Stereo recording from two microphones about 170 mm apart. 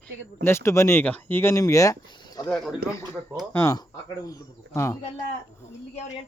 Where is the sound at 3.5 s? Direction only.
20° left (ahead or behind).